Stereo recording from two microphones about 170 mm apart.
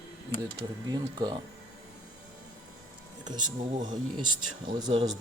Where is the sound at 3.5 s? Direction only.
30° right (ahead or behind).